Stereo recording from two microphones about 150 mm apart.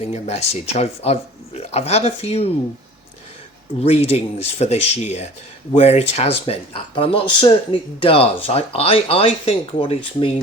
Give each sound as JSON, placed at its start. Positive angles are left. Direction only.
{"t": 0.1, "sound": "speech", "side_deg": 45}
{"t": 3.8, "sound": "speech", "side_deg": 45}